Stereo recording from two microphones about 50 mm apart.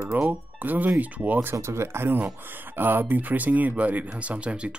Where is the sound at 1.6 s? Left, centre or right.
Right.